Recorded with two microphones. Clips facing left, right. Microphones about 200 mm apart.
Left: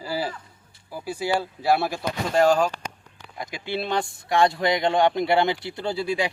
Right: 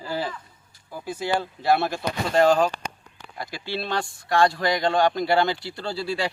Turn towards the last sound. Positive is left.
turn(degrees=15)  # may be behind; listen again after turning